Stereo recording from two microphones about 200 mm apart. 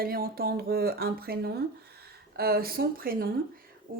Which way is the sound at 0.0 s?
50° right (ahead or behind).